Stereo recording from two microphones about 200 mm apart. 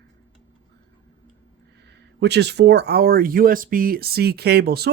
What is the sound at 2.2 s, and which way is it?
Speech, 55° right (ahead or behind).